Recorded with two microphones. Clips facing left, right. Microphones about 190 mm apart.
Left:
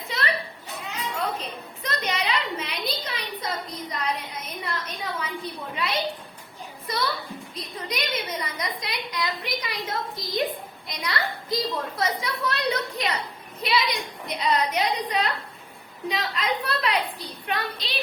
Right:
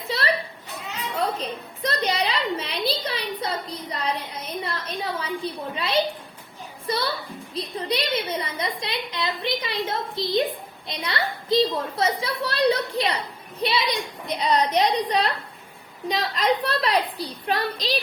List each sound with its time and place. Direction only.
0.1 s children playing: 35° right (ahead or behind)
1.4 s a sound: 35° right (ahead or behind)
6.9 s a woman's voice: 30° right (ahead or behind)